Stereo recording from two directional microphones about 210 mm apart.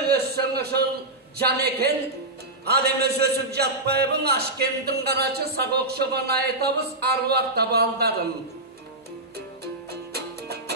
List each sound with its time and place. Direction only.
0.0 s a sound: 50° right (ahead or behind)
1.4 s a man's voice: 50° right (ahead or behind)
9.8 s music: 50° right (ahead or behind)